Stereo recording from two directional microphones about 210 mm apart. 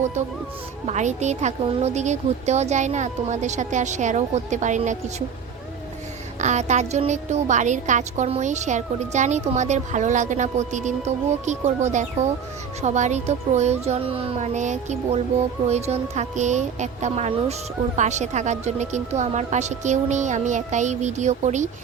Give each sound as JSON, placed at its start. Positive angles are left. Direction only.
{"t": 0.9, "sound": "a woman's voice", "side_deg": -35}
{"t": 6.4, "sound": "a woman's voice", "side_deg": -35}